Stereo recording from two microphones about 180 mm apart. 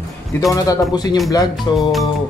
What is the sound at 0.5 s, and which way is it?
Speech, 20° left (ahead or behind).